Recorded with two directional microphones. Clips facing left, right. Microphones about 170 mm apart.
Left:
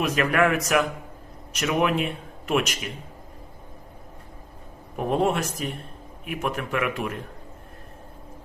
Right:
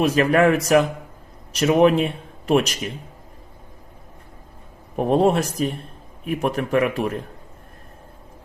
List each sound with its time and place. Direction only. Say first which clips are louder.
0.0 s a man's voice: right 5 dB; 30° right (ahead or behind)
4.9 s a man's voice: right 6 dB; 35° right (ahead or behind)